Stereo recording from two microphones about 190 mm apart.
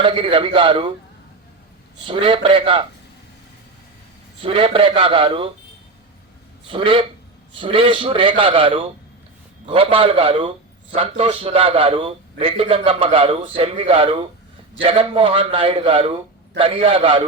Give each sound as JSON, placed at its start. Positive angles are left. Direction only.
{"t": 0.0, "sound": "a man's voice", "side_deg": -25}
{"t": 2.0, "sound": "a man's voice", "side_deg": -25}
{"t": 4.4, "sound": "a man's voice", "side_deg": -25}
{"t": 6.7, "sound": "a man's voice", "side_deg": -30}